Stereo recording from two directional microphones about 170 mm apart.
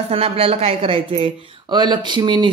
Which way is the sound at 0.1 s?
35° right (ahead or behind).